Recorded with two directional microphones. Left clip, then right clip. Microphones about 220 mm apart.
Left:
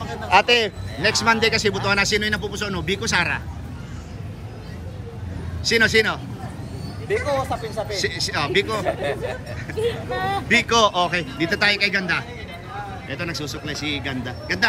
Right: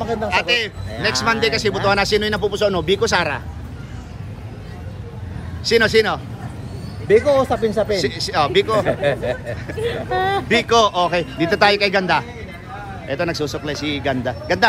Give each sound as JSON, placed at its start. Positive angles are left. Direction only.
{"t": 0.3, "sound": "speech", "side_deg": 10}
{"t": 5.6, "sound": "speech", "side_deg": -5}
{"t": 7.1, "sound": "speech", "side_deg": -40}
{"t": 8.0, "sound": "speech", "side_deg": -10}
{"t": 9.8, "sound": "speech", "side_deg": -40}
{"t": 10.5, "sound": "speech", "side_deg": -5}